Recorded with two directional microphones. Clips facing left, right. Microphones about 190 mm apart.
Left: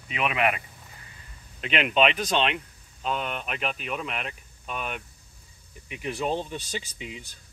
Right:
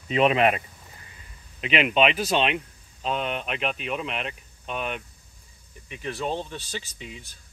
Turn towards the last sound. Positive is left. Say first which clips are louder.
# left 1 dB
turn(degrees=15)  # may be behind; listen again after turning